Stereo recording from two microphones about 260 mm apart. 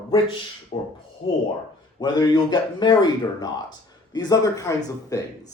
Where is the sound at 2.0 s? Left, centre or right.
Centre.